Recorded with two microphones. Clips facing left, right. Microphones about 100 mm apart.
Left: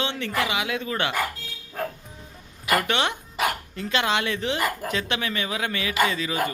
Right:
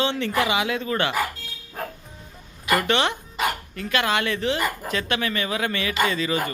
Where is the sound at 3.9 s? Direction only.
20° left (ahead or behind).